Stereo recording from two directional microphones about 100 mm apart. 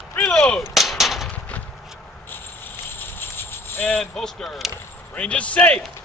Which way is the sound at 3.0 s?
20° left (ahead or behind).